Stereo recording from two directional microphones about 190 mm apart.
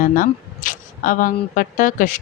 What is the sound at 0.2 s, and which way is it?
Camera, 45° left (ahead or behind).